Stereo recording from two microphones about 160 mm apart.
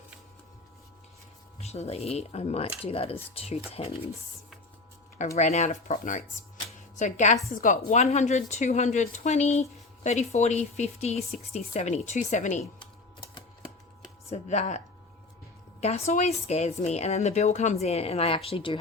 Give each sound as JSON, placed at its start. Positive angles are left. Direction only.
{"t": 1.6, "sound": "speech", "side_deg": 40}
{"t": 5.4, "sound": "speech", "side_deg": 45}
{"t": 6.7, "sound": "a sound", "side_deg": 50}
{"t": 7.6, "sound": "speech", "side_deg": 50}
{"t": 14.3, "sound": "speech", "side_deg": 45}
{"t": 15.8, "sound": "speech", "side_deg": 45}